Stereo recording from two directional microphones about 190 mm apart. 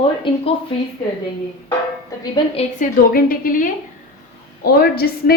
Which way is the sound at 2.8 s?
50° left (ahead or behind).